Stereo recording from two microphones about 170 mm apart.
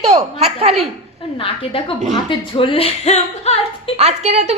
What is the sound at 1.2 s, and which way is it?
Speech, 35° left (ahead or behind).